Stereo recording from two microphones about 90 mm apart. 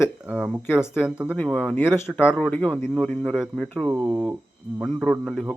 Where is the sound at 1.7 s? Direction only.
25° left (ahead or behind).